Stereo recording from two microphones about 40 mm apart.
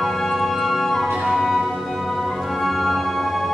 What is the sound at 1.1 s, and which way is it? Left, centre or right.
Music, centre.